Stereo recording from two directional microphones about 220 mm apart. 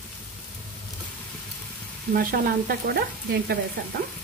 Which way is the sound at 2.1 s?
40° right (ahead or behind).